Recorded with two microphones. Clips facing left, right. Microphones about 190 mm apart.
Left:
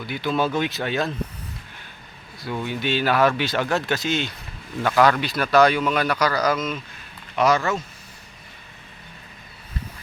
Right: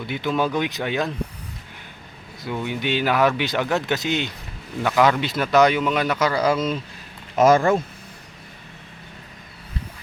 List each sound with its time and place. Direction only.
0.0 s speech: 20° right (ahead or behind)
2.6 s speech: 15° right (ahead or behind)
5.0 s speech: 20° right (ahead or behind)
7.3 s speech: 50° right (ahead or behind)